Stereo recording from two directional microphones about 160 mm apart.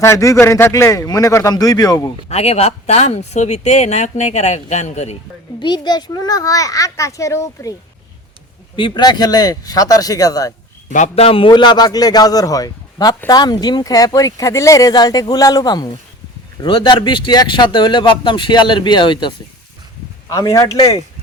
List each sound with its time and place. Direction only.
0.0 s a man's voice: 20° left (ahead or behind)
2.3 s speech: 40° left (ahead or behind)
5.5 s a man's voice: 30° left (ahead or behind)
8.7 s a man's voice: 30° left (ahead or behind)
10.8 s a man's voice: 50° left (ahead or behind); by 19.3 s 30° left (ahead or behind)
20.3 s a man's voice: 20° left (ahead or behind)